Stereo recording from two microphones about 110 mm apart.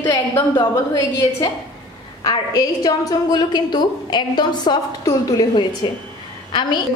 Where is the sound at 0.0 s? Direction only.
40° left (ahead or behind).